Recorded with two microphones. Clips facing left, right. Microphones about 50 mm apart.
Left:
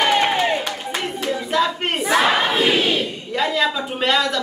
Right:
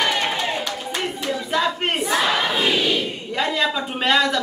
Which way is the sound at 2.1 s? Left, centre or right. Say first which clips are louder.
Left 5 dB; left.